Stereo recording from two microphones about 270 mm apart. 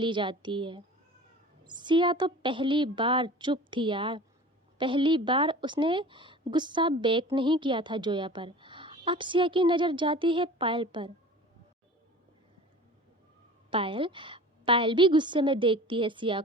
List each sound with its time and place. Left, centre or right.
0.0 s a woman's voice: centre
13.7 s a woman's voice: centre